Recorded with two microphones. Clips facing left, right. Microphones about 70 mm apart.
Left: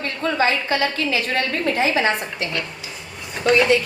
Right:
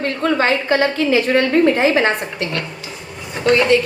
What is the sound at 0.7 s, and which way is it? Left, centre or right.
A woman's voice, right.